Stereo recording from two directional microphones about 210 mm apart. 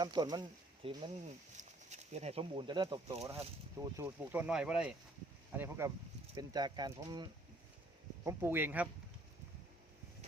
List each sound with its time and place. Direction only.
0.0 s speech: 20° right (ahead or behind)